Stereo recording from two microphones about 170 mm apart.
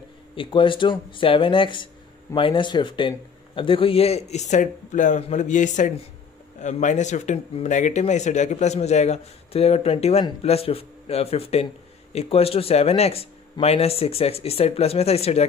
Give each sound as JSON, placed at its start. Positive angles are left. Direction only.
{"t": 0.4, "sound": "a man's voice", "side_deg": 30}